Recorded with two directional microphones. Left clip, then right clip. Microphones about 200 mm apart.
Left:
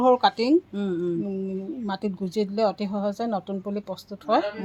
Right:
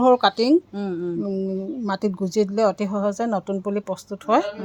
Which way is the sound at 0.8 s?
5° left (ahead or behind).